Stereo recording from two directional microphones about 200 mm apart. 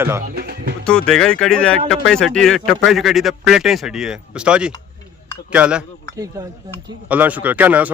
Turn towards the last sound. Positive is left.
turn(degrees=-5)  # may be behind; listen again after turning